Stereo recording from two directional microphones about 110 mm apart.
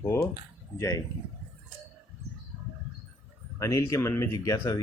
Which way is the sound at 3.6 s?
30° left (ahead or behind).